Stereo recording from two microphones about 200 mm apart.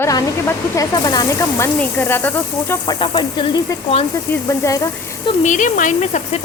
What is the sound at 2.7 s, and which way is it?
Speech, 20° left (ahead or behind).